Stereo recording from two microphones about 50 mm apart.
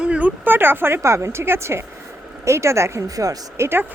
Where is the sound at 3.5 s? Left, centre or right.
Right.